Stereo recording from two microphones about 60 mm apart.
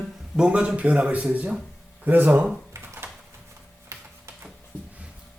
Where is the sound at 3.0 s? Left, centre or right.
Right.